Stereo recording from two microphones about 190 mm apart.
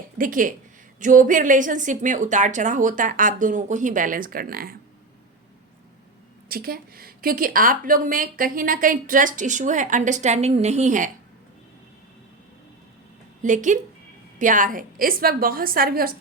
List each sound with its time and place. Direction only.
0.2 s a woman's voice: 45° right (ahead or behind)
6.5 s a woman's voice: 50° right (ahead or behind)
13.4 s a woman's voice: 40° right (ahead or behind)